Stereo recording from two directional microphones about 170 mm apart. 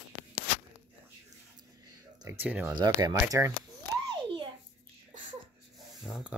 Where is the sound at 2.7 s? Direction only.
25° right (ahead or behind).